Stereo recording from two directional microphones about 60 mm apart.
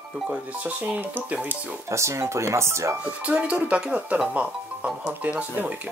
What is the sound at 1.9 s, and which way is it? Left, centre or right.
Speech, right.